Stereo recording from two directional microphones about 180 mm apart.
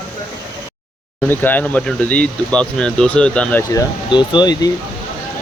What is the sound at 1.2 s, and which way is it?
Speech, 10° left (ahead or behind).